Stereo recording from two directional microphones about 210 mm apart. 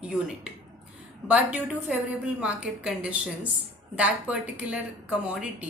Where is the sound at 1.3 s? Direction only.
5° right (ahead or behind).